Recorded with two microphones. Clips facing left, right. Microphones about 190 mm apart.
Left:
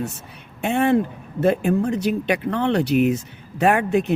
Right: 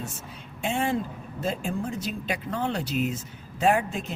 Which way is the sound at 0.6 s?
65° left (ahead or behind).